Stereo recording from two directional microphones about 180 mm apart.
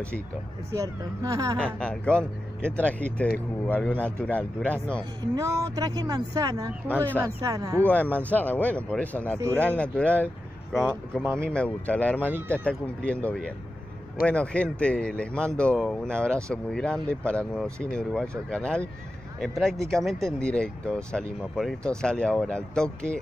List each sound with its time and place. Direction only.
0.7 s speech: 20° right (ahead or behind)
1.6 s speech: 5° left (ahead or behind)
5.3 s speech: 20° right (ahead or behind)
7.8 s speech: 10° left (ahead or behind)